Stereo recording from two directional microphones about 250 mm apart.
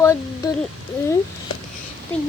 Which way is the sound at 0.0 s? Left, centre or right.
Centre.